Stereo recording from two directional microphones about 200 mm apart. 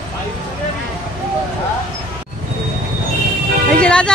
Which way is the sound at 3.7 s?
5° left (ahead or behind).